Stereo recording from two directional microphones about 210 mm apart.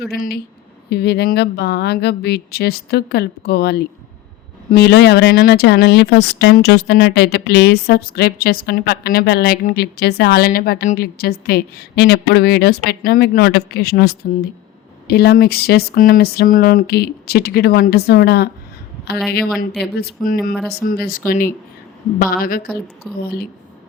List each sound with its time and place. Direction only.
0.1 s speech: 50° left (ahead or behind)
19.8 s speech: 50° left (ahead or behind)